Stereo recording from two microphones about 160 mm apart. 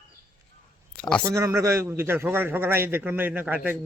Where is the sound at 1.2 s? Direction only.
20° right (ahead or behind).